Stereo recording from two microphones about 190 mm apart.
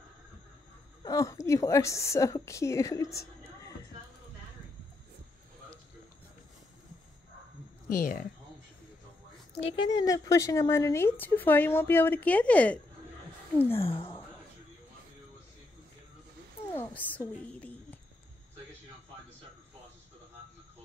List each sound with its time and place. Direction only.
1.0 s a woman's voice: 15° left (ahead or behind)
7.9 s speech: 50° left (ahead or behind)
9.5 s a woman's voice: 25° left (ahead or behind); by 12.8 s 5° left (ahead or behind)
13.7 s a sound: 30° left (ahead or behind)
16.7 s a woman's voice: 10° left (ahead or behind)